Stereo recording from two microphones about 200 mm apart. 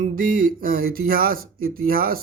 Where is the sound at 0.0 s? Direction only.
45° right (ahead or behind).